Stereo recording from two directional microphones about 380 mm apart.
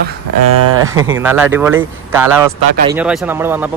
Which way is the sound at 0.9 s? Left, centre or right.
Centre.